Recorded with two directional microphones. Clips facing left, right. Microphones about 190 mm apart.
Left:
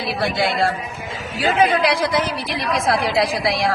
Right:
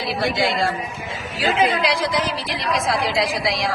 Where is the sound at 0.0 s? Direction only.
60° left (ahead or behind).